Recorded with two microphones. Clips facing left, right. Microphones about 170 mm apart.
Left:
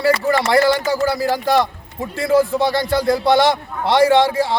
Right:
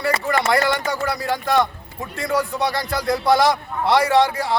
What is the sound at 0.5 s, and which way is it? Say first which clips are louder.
A man's voice: left 5 dB; 30° left (ahead or behind).